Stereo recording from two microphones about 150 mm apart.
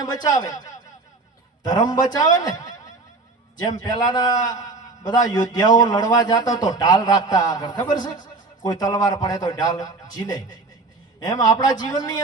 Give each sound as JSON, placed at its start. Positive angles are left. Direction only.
{"t": 0.0, "sound": "a man's voice", "side_deg": 25}